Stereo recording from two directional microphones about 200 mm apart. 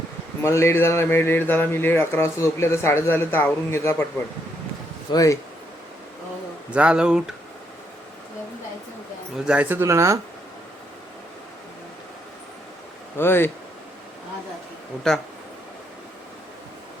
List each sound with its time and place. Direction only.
0.4 s speech: 15° left (ahead or behind)
5.1 s speech: 15° left (ahead or behind)
6.7 s speech: 5° right (ahead or behind)
9.4 s speech: 5° right (ahead or behind)
13.1 s speech: 10° left (ahead or behind)